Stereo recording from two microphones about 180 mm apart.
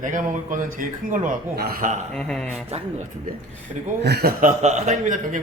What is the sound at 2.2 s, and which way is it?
Speech, 5° left (ahead or behind).